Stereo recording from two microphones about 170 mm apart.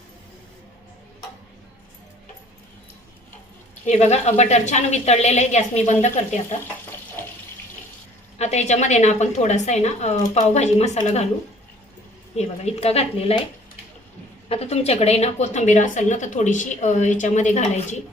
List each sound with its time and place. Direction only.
3.8 s a woman's voice: 40° left (ahead or behind)
8.4 s a woman's voice: 40° left (ahead or behind)
12.4 s a woman's voice: 40° left (ahead or behind)
14.5 s a woman's voice: 35° left (ahead or behind)